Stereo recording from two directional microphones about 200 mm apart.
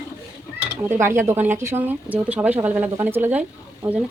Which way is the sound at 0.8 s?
10° right (ahead or behind).